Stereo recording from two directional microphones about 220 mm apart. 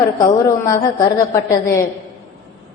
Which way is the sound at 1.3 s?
15° left (ahead or behind).